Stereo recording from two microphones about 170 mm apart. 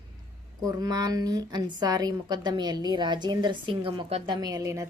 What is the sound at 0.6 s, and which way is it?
A woman's voice, 20° right (ahead or behind).